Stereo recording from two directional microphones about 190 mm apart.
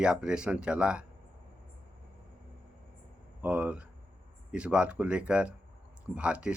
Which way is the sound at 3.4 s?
5° right (ahead or behind).